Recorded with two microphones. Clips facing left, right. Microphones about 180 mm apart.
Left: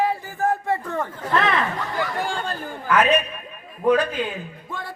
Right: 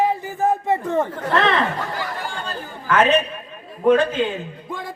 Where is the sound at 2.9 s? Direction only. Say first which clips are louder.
Right 2 dB; 30° right (ahead or behind).